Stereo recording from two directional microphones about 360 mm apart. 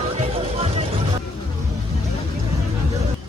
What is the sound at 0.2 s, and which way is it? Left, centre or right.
Music, centre.